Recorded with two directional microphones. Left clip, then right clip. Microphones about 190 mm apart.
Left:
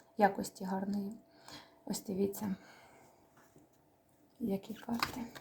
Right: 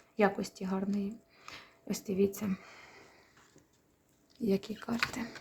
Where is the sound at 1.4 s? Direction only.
15° right (ahead or behind).